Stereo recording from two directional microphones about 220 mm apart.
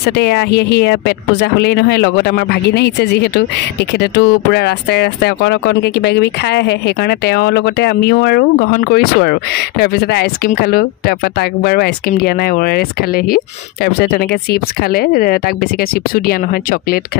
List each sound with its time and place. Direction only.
0.1 s speech: 50° left (ahead or behind)